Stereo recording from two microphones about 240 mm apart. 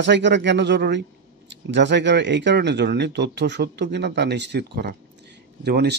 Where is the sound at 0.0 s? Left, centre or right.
Right.